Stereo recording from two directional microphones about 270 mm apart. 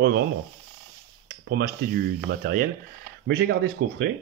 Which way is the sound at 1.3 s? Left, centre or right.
Right.